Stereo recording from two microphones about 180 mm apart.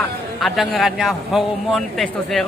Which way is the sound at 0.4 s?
Centre (ahead or behind).